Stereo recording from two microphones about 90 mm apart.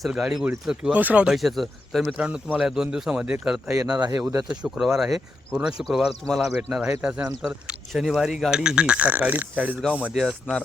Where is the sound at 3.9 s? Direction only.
45° right (ahead or behind).